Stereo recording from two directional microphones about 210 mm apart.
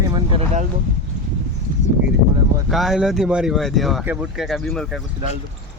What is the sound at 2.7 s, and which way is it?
Speech, centre (ahead or behind).